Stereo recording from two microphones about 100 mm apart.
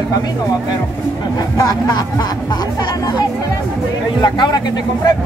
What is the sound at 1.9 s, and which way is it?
Speech, 40° left (ahead or behind).